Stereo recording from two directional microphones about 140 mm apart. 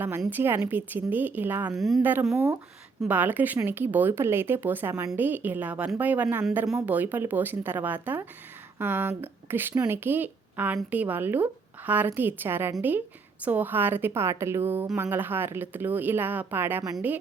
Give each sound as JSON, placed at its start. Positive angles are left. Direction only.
{"t": 0.3, "sound": "speech", "side_deg": -15}
{"t": 1.7, "sound": "speech", "side_deg": 0}
{"t": 2.0, "sound": "speech", "side_deg": -15}